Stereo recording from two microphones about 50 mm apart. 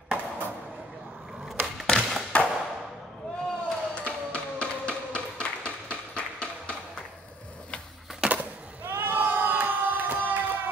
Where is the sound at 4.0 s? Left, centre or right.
Centre.